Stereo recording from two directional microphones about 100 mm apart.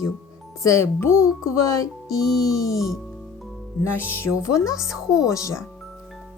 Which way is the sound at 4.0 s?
20° left (ahead or behind).